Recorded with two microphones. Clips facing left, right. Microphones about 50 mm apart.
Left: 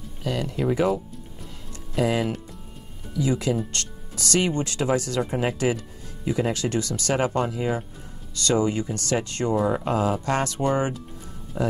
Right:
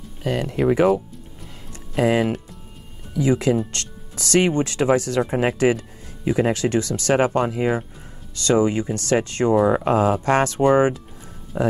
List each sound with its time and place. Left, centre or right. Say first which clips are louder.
0.2 s speech: right 5 dB; right
2.0 s speech: right 5 dB; right
3.7 s music: right 1 dB; right
4.3 s speech: right 5 dB; right
8.5 s speech: right 4 dB; right
10.6 s speech: right 7 dB; right